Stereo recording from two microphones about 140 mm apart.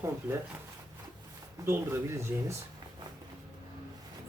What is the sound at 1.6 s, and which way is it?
Speech, 20° right (ahead or behind).